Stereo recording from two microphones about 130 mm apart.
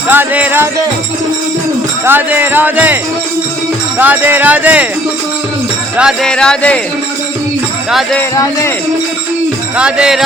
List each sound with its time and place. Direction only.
0.1 s music: 15° right (ahead or behind)
2.0 s speech: 15° right (ahead or behind)
6.2 s music: 5° left (ahead or behind)
9.7 s speech: 5° right (ahead or behind)